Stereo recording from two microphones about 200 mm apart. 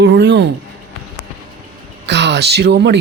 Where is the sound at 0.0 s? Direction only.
60° right (ahead or behind).